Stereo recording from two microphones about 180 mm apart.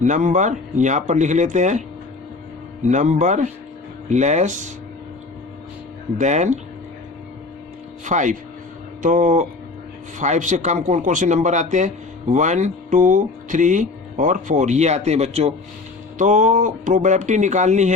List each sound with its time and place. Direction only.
0.0 s speech: 45° right (ahead or behind)
2.8 s speech: 40° right (ahead or behind)
6.1 s speech: 40° right (ahead or behind)
8.0 s speech: 45° right (ahead or behind)